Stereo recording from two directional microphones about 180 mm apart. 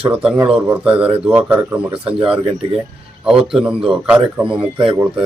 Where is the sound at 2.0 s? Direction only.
30° right (ahead or behind).